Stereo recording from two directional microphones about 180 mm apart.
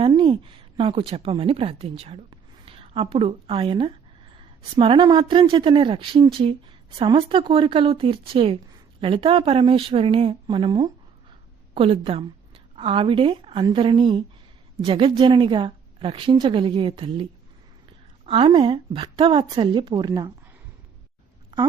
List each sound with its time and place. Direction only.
0.0 s a woman's voice: 30° right (ahead or behind)
18.3 s a woman's voice: 30° right (ahead or behind)
21.5 s speech: 25° right (ahead or behind)